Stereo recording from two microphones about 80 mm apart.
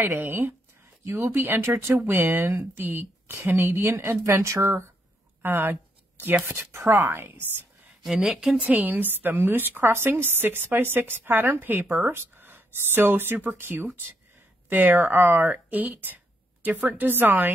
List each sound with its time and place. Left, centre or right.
0.0 s speech: right
5.4 s a sound: right
6.4 s speech: right
8.0 s a woman's voice: centre
8.5 s speech: centre